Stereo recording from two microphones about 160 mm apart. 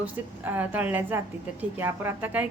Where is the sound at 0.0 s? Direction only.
10° right (ahead or behind).